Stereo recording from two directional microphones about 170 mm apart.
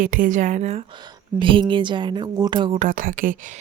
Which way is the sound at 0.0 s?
55° right (ahead or behind).